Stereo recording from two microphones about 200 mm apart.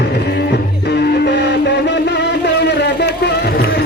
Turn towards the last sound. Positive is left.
turn(degrees=55)  # may be behind; listen again after turning